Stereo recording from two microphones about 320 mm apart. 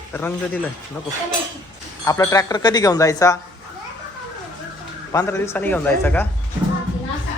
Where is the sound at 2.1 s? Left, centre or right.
Centre.